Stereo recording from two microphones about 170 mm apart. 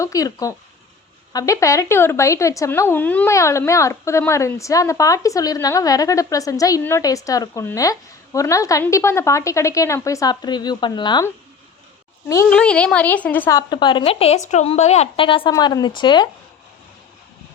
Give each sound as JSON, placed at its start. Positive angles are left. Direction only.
{"t": 0.0, "sound": "speech", "side_deg": 20}
{"t": 12.5, "sound": "a woman's voice", "side_deg": 5}
{"t": 13.6, "sound": "a woman's voice", "side_deg": 25}